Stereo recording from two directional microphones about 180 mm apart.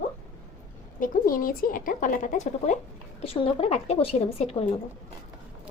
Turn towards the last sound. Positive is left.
turn(degrees=35)  # may be behind; listen again after turning